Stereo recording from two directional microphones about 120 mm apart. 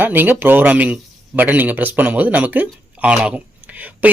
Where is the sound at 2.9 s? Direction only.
10° right (ahead or behind).